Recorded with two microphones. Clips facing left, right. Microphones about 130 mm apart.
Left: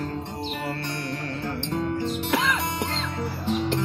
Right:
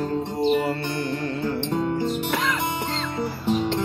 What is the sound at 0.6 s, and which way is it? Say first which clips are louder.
Music: right 5 dB; centre (ahead or behind).